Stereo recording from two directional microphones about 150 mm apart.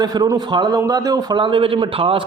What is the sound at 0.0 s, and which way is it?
A man's voice, 25° right (ahead or behind).